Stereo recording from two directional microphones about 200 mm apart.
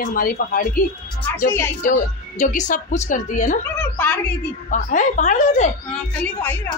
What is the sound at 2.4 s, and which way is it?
A woman's voice, 40° left (ahead or behind).